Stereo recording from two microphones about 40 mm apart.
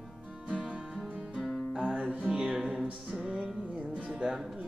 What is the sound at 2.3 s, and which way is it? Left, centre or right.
Music, centre.